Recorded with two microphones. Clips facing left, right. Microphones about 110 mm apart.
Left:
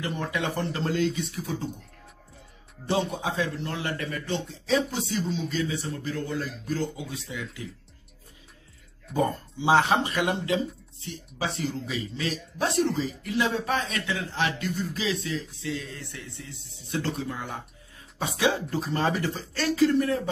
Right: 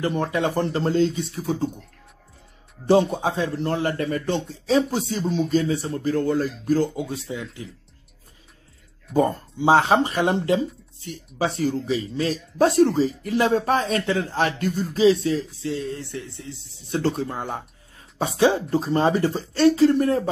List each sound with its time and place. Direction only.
0.0 s speech: 40° right (ahead or behind)
2.9 s speech: 40° right (ahead or behind)
9.1 s speech: 40° right (ahead or behind)